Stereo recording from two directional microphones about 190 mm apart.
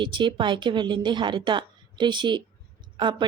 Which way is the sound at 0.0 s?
25° right (ahead or behind).